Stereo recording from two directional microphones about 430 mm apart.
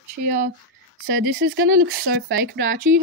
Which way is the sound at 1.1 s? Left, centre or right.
Right.